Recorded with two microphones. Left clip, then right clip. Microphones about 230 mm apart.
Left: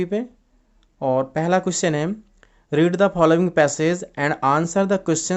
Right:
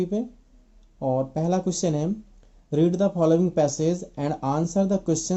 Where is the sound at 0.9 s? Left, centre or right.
Left.